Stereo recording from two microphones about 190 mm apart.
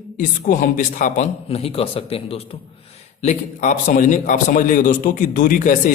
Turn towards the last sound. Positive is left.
turn(degrees=45)  # may be behind; listen again after turning